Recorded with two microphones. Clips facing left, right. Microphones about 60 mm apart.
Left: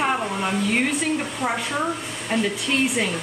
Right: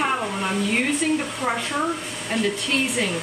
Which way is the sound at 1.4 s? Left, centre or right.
Centre.